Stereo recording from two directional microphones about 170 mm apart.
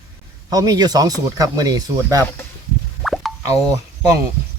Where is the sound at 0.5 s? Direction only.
20° right (ahead or behind).